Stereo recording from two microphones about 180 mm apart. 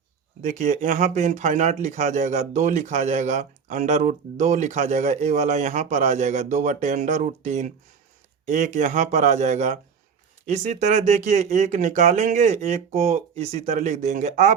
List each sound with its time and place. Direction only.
0.4 s speech: 45° right (ahead or behind)